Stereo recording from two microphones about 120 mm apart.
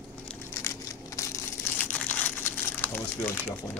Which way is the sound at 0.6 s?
25° left (ahead or behind).